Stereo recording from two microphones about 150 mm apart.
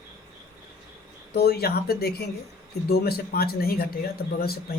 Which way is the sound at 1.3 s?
90° left.